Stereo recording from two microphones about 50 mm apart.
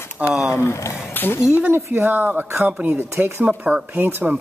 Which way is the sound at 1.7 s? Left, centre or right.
Right.